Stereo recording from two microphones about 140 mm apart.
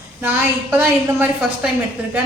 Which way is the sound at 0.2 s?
15° right (ahead or behind).